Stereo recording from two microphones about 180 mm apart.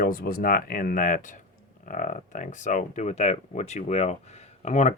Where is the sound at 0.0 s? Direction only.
55° left (ahead or behind).